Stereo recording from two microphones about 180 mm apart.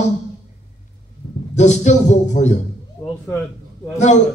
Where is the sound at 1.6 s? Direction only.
40° left (ahead or behind).